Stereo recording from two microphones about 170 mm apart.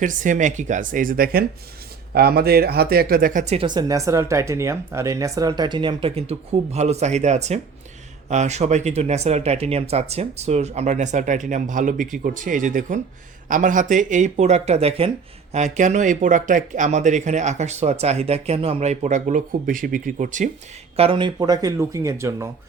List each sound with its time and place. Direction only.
0.0 s speech: 50° right (ahead or behind)
3.7 s speech: 25° right (ahead or behind); by 20.5 s 50° right (ahead or behind)
20.9 s speech: 35° right (ahead or behind); by 22.4 s 20° right (ahead or behind)